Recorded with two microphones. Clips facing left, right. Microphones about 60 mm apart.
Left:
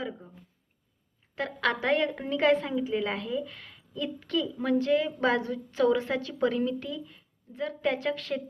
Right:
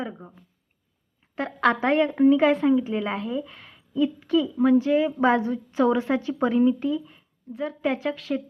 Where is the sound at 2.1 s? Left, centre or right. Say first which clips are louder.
Right 7 dB; centre.